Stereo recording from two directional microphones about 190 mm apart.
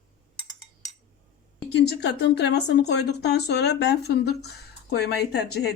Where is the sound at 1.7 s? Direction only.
60° left (ahead or behind).